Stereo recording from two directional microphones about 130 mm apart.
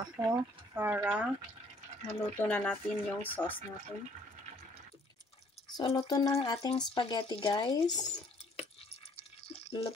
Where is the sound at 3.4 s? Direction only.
15° left (ahead or behind).